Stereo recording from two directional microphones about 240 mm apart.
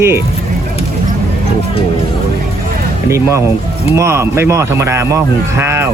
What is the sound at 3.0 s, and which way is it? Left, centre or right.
Speech, centre.